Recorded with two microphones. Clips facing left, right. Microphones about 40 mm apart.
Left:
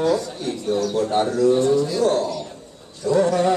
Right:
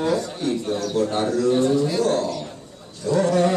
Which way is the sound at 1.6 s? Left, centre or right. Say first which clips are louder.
Left 1 dB; centre.